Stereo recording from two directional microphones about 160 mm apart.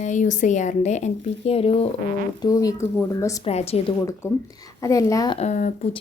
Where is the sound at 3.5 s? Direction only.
40° left (ahead or behind).